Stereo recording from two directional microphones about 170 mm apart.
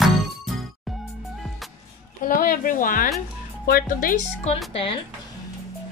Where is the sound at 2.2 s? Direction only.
55° left (ahead or behind).